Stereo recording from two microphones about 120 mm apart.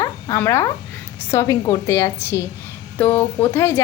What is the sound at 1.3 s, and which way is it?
Speech, 25° left (ahead or behind).